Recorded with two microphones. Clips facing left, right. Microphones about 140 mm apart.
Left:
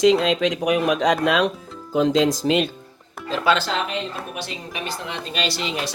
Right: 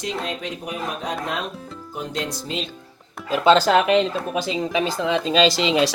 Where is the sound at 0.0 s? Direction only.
90° left.